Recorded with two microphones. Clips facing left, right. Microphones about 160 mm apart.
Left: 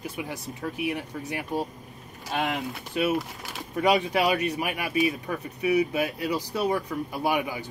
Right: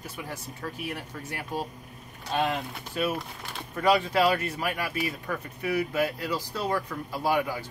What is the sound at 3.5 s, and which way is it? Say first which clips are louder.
Speech: left 1 dB; 15° left (ahead or behind).